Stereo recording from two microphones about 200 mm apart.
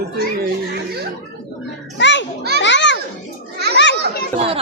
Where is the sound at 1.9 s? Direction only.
65° left (ahead or behind).